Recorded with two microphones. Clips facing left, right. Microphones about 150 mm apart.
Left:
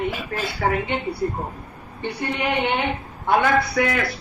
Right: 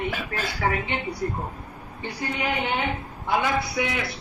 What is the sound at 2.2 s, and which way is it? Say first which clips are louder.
Speech: left 4 dB; 25° left (ahead or behind).